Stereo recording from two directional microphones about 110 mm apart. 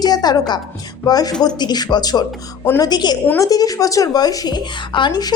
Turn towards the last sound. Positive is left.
turn(degrees=45)  # may be behind; listen again after turning